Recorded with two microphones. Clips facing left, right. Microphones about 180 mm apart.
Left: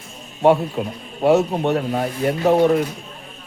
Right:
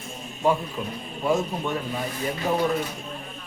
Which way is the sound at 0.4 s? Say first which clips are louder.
Left 8 dB; 70° left (ahead or behind).